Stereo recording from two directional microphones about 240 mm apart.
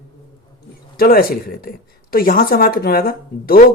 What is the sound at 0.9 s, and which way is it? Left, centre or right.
Speech, left.